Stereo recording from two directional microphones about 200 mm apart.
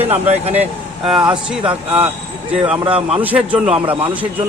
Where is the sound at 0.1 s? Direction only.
30° right (ahead or behind).